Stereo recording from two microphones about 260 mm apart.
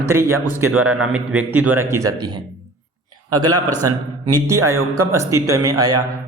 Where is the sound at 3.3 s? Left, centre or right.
Right.